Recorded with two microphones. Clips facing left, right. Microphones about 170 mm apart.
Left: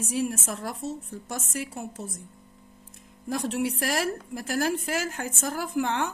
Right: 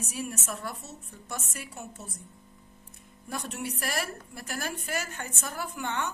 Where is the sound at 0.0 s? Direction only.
90° left.